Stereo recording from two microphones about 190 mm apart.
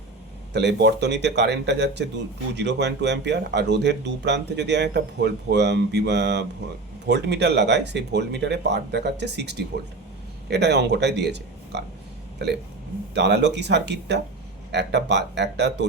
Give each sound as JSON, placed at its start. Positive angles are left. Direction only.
{"t": 0.5, "sound": "speech", "side_deg": -60}